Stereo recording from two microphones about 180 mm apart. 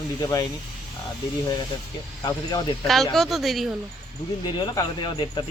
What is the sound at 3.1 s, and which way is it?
Speech, centre (ahead or behind).